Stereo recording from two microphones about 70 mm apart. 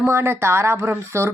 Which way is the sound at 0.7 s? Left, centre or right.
Right.